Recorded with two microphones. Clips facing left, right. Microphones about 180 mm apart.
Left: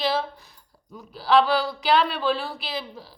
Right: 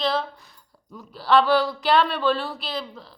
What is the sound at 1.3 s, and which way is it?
A woman's voice, centre (ahead or behind).